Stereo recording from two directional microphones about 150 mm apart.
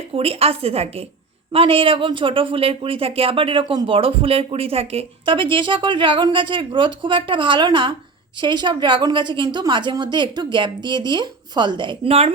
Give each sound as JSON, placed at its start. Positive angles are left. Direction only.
{"t": 0.1, "sound": "speech", "side_deg": -40}